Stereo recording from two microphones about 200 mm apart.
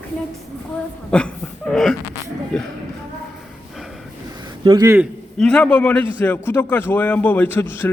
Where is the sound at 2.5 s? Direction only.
5° left (ahead or behind).